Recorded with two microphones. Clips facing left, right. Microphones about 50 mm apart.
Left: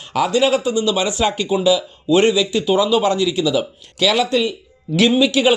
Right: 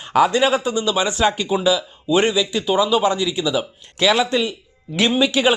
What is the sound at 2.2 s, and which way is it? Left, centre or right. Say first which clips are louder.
A man's voice: left 3 dB; centre.